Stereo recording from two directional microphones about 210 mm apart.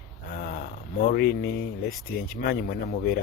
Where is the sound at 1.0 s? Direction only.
45° left (ahead or behind).